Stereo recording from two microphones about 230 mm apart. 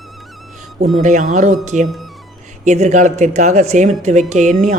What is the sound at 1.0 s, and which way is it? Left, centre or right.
Speech, right.